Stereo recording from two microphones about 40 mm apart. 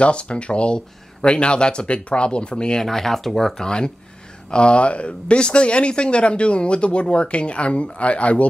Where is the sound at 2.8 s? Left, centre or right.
Centre.